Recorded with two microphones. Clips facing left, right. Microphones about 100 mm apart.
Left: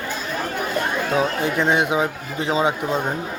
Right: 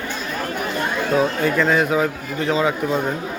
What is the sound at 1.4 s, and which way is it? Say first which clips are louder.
A man's voice: right 2 dB; 25° left (ahead or behind).